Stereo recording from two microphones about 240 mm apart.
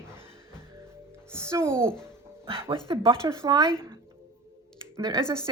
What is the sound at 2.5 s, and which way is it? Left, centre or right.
Speech, right.